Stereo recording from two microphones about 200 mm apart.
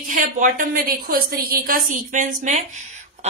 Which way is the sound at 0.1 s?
40° right (ahead or behind).